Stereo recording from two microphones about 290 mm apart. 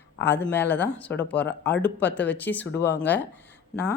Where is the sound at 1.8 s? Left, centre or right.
Centre.